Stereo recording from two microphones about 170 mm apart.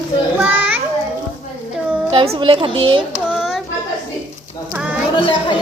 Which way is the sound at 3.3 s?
Centre (ahead or behind).